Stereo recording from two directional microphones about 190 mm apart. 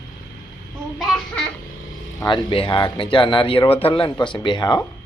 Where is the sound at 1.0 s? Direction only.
5° left (ahead or behind).